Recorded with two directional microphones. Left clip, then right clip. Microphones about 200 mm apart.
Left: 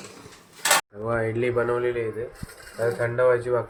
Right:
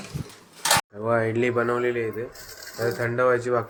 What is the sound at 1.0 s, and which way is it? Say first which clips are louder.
Speech: right 2 dB; 10° right (ahead or behind).